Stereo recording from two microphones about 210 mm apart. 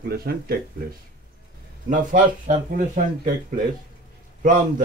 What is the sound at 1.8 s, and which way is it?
Speech, 40° right (ahead or behind).